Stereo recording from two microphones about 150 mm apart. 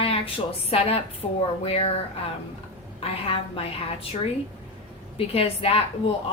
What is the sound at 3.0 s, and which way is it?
A woman's voice, 40° left (ahead or behind).